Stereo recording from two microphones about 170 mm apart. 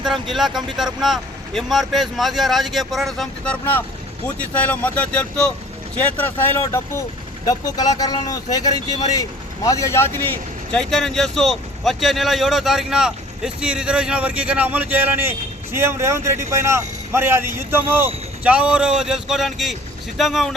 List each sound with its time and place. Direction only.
0.0 s a man's voice: centre (ahead or behind)